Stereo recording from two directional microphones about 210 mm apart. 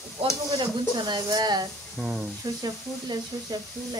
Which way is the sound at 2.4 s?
20° right (ahead or behind).